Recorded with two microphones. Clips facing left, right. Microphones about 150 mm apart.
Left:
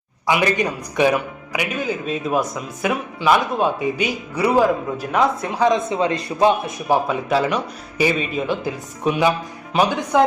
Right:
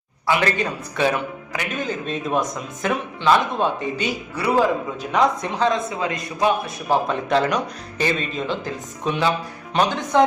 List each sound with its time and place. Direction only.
0.3 s speech: 15° left (ahead or behind)
5.6 s a man's voice: 25° left (ahead or behind)
6.7 s speech: 15° left (ahead or behind)